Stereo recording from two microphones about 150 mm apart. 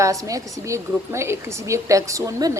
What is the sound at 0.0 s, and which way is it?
Speech, 20° right (ahead or behind).